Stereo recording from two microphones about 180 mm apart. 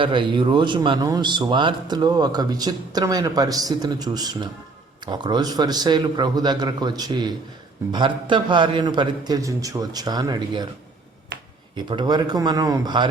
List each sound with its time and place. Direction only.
0.0 s a man's voice: 25° right (ahead or behind)
11.9 s a man's voice: 25° right (ahead or behind)